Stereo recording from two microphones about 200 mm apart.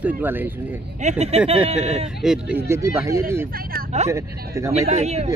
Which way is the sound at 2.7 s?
15° right (ahead or behind).